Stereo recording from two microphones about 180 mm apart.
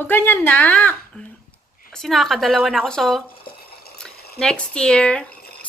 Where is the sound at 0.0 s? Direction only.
10° left (ahead or behind).